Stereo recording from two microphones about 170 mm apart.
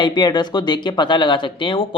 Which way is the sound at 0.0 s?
25° left (ahead or behind).